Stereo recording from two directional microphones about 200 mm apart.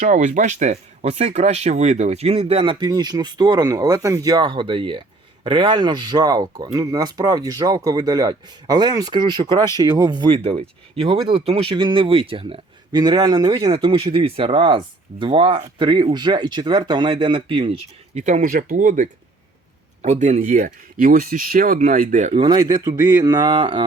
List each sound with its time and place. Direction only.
0.0 s speech: 40° right (ahead or behind)
22.4 s speech: 20° right (ahead or behind)